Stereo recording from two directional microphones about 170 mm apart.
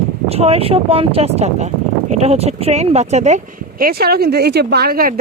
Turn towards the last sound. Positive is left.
turn(degrees=-60)  # may be behind; listen again after turning